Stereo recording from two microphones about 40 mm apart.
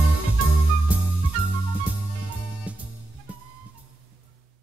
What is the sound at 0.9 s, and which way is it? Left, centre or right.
Music, right.